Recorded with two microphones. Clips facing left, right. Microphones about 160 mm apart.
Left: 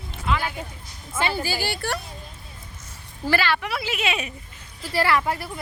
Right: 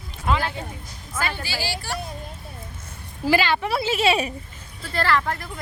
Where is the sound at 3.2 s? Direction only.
15° right (ahead or behind); by 4.3 s 30° right (ahead or behind).